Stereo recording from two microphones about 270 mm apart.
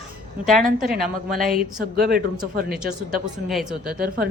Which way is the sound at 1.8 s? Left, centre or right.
Right.